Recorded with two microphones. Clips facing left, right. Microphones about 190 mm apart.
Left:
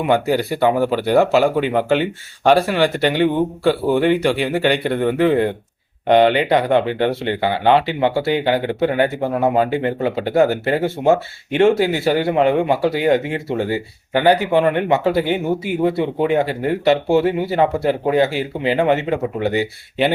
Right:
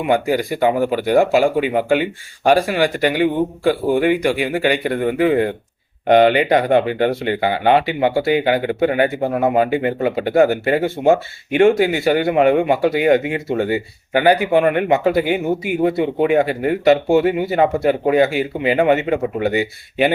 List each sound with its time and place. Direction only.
0.1 s speech: 15° right (ahead or behind)